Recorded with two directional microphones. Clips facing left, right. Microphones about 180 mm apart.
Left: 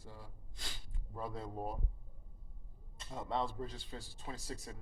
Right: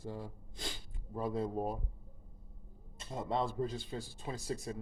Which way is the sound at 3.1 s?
15° right (ahead or behind).